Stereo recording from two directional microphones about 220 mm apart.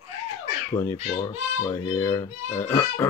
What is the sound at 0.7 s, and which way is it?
Speech, 10° left (ahead or behind).